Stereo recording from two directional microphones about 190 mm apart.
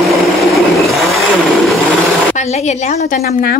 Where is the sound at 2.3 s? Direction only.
35° left (ahead or behind).